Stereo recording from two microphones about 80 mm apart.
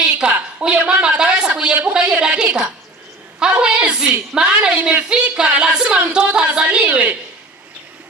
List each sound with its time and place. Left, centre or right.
0.1 s a woman's voice: centre